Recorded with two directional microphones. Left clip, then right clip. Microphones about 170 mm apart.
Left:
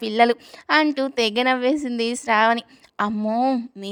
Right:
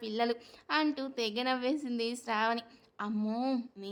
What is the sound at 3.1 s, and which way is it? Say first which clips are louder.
Speech: left 12 dB; 35° left (ahead or behind).